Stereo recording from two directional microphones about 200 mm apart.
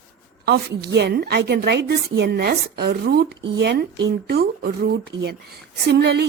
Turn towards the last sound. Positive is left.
turn(degrees=-55)  # may be behind; listen again after turning